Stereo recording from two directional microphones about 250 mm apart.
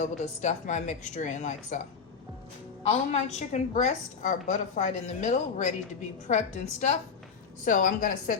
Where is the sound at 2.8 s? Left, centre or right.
Left.